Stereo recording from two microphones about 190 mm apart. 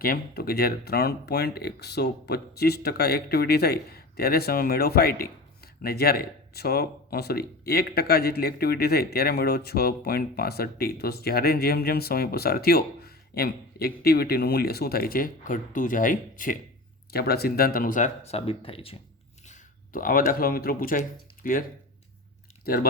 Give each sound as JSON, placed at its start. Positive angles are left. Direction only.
{"t": 0.0, "sound": "speech", "side_deg": 50}
{"t": 19.5, "sound": "speech", "side_deg": 45}
{"t": 22.6, "sound": "speech", "side_deg": 55}